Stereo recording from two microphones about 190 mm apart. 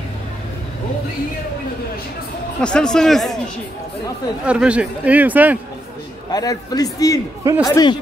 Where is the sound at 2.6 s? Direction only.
5° left (ahead or behind).